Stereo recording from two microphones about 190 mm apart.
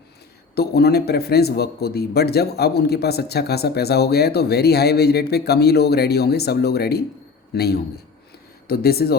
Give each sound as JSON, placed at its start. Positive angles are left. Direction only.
{"t": 0.5, "sound": "a man's voice", "side_deg": 55}